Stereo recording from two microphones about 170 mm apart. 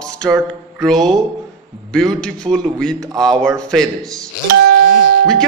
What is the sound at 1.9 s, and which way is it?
A man's voice, 5° left (ahead or behind).